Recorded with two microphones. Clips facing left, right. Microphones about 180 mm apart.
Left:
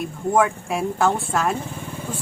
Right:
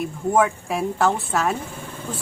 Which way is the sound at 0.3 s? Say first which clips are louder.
Even; centre (ahead or behind).